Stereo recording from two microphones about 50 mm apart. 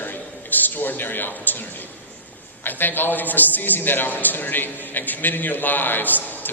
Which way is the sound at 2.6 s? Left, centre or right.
Left.